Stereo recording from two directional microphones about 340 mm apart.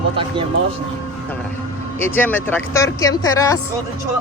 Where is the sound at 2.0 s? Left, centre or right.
Centre.